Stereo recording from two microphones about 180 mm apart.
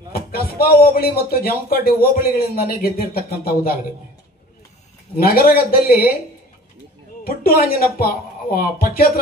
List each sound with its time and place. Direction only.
0.1 s speech: 55° left (ahead or behind)
5.1 s speech: 55° left (ahead or behind)
7.2 s speech: 55° left (ahead or behind)